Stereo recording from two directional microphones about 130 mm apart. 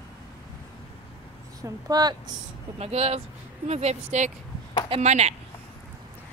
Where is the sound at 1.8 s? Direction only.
30° right (ahead or behind).